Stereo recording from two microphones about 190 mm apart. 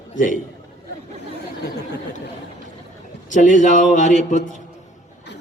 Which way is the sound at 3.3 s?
40° left (ahead or behind).